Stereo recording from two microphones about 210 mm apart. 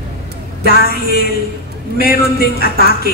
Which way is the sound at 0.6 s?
45° left (ahead or behind).